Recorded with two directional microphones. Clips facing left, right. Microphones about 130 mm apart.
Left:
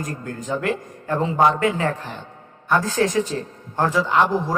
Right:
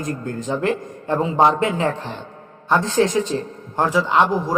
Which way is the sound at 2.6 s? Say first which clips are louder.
Right 2 dB; 25° right (ahead or behind).